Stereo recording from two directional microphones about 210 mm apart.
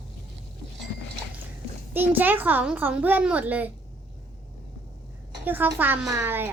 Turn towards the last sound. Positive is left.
turn(degrees=-10)  # may be behind; listen again after turning